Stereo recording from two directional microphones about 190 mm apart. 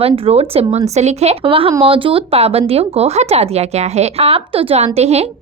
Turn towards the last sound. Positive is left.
turn(degrees=-35)  # may be behind; listen again after turning